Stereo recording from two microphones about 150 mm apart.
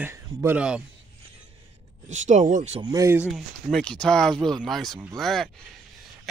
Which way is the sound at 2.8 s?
20° right (ahead or behind).